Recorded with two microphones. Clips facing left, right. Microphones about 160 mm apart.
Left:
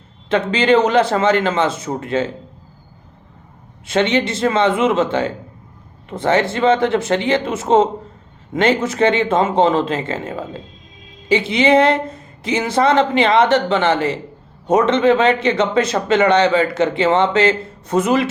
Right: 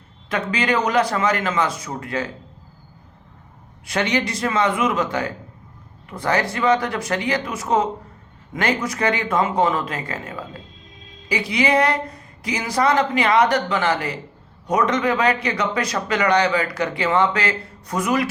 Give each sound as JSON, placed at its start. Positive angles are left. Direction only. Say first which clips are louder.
{"t": 0.3, "sound": "speech", "louder": "left 7 dB", "side_deg": 25}
{"t": 3.8, "sound": "speech", "louder": "left 5 dB", "side_deg": 25}